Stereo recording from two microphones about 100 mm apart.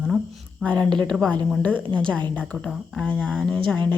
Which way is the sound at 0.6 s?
10° left (ahead or behind).